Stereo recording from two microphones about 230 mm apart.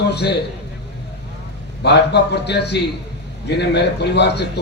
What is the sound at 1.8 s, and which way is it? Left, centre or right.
A man's voice, left.